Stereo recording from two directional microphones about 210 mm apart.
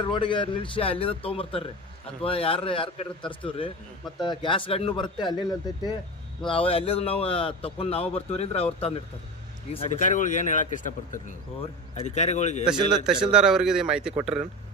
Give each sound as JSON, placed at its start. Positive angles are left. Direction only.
{"t": 0.1, "sound": "a man's voice", "side_deg": 25}
{"t": 13.1, "sound": "speech", "side_deg": -5}